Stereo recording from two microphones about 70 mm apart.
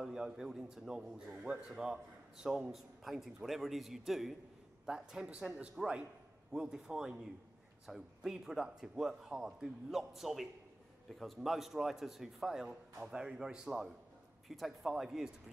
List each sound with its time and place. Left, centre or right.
0.0 s a man's voice: centre